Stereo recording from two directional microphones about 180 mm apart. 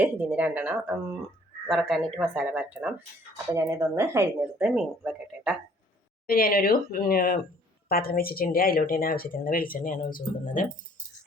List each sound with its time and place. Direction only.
0.0 s speech: 10° right (ahead or behind)
1.6 s speech: centre (ahead or behind)
2.1 s speech: 10° right (ahead or behind)
6.2 s speech: 55° left (ahead or behind)